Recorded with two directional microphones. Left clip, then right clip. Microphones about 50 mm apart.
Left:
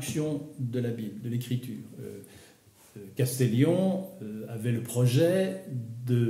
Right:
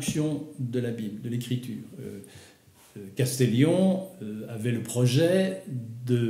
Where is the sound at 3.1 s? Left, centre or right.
Left.